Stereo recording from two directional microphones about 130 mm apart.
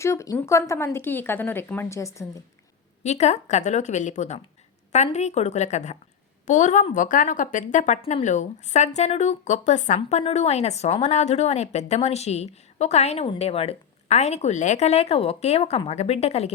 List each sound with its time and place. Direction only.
0.0 s a woman's voice: 20° left (ahead or behind)
3.0 s a woman's voice: 60° left (ahead or behind)
6.9 s a woman's voice: 85° left; by 16.5 s 50° left (ahead or behind)